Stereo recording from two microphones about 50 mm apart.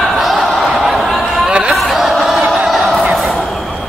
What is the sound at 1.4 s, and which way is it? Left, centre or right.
Chatter, centre.